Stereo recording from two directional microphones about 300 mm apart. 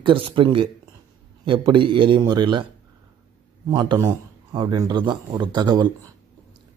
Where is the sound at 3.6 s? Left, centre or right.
Centre.